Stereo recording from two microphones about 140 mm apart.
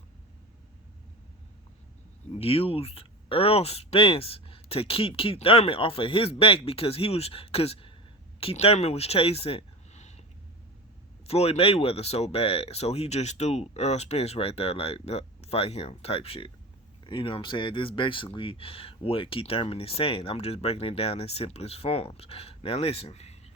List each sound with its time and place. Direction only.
2.3 s speech: 45° left (ahead or behind)
11.3 s speech: 45° left (ahead or behind)